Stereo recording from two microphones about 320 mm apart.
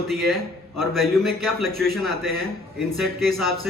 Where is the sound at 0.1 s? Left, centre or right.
Centre.